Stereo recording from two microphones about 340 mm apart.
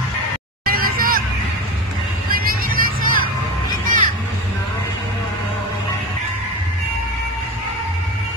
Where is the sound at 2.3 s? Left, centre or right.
Right.